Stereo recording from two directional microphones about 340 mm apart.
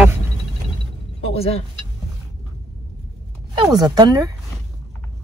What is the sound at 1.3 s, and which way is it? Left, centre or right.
Speech, centre.